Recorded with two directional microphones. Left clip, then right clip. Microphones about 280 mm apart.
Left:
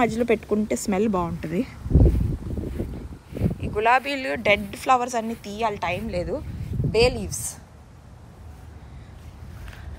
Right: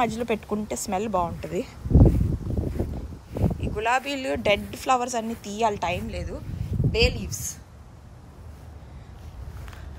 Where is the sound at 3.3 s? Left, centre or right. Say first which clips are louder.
Left 1 dB; centre.